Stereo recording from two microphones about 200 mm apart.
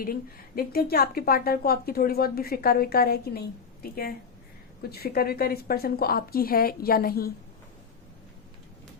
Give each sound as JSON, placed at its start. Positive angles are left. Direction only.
{"t": 0.0, "sound": "a woman's voice", "side_deg": 50}